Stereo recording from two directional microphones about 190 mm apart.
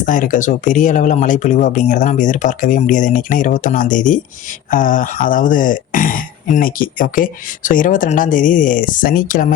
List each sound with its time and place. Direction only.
0.0 s speech: 40° left (ahead or behind)